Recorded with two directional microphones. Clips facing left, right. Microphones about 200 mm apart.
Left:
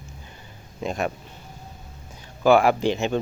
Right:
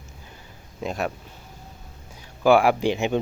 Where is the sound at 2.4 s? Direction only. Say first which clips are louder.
Even; 10° right (ahead or behind).